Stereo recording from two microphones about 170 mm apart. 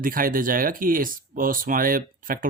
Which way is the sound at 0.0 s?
55° right (ahead or behind).